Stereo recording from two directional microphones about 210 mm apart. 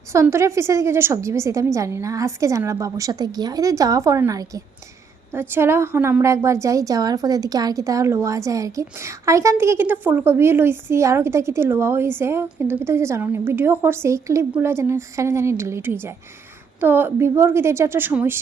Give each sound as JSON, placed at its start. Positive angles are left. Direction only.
{"t": 0.1, "sound": "a woman's voice", "side_deg": -15}